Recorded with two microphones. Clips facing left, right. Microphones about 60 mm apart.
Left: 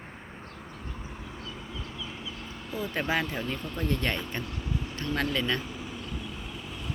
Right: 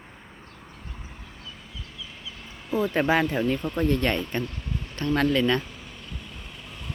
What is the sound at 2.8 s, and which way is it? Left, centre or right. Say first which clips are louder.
Speech: right 7 dB; right.